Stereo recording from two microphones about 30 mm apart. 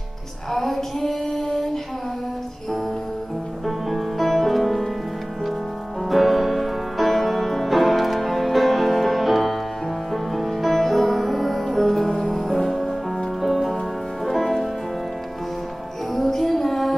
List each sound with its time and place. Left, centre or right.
0.5 s female singing: centre
3.6 s music: centre
6.0 s music: centre
16.1 s music: centre